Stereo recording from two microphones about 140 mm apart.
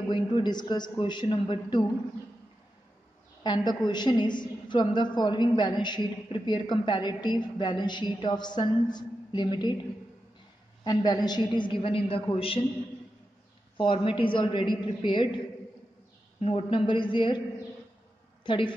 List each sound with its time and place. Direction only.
0.1 s a woman's voice: 30° left (ahead or behind)
3.4 s a woman's voice: 30° left (ahead or behind)
10.8 s a woman's voice: 35° left (ahead or behind)
13.7 s a woman's voice: 35° left (ahead or behind)
18.4 s a woman's voice: 35° left (ahead or behind)